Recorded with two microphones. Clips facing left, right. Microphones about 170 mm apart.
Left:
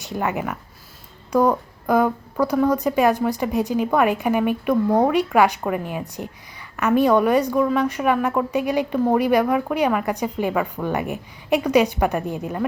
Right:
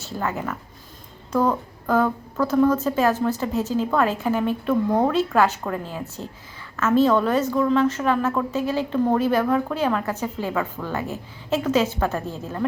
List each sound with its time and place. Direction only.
0.0 s a woman's voice: 15° left (ahead or behind)